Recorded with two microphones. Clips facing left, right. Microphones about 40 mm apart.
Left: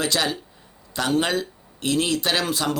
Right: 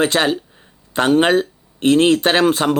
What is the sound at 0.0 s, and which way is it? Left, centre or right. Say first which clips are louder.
Speech: right 7 dB; right.